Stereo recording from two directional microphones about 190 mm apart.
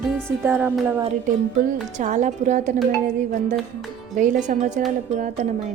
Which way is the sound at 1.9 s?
40° right (ahead or behind).